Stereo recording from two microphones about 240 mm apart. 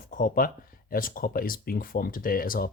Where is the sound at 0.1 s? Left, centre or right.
Left.